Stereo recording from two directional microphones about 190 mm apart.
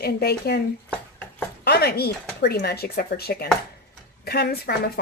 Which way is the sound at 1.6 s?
55° left (ahead or behind).